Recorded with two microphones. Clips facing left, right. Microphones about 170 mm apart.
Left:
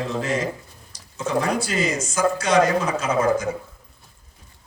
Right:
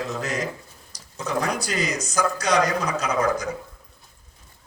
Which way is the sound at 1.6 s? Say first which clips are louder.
Left 3 dB; 40° right (ahead or behind).